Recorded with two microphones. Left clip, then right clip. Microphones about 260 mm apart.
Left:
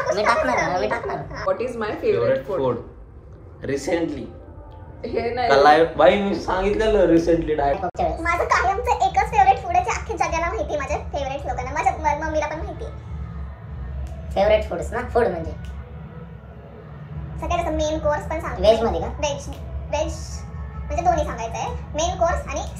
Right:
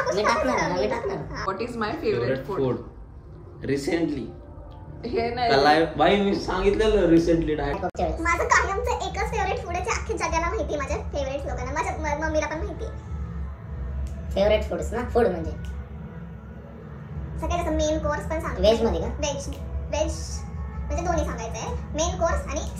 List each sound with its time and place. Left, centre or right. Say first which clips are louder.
0.0 s a woman's voice: left 3 dB; centre
1.3 s a child's voice: left 5 dB; centre
3.6 s speech: left 2 dB; centre
5.0 s a child's voice: left 2 dB; centre
5.5 s a man's voice: left 6 dB; centre
8.2 s a child's voice: even; centre
14.3 s a woman's voice: left 3 dB; centre
17.4 s a child's voice: left 3 dB; centre